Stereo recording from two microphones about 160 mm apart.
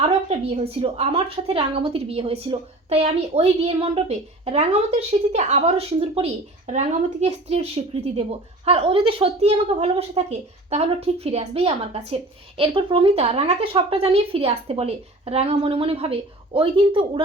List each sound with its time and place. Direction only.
0.0 s a woman's voice: 40° right (ahead or behind)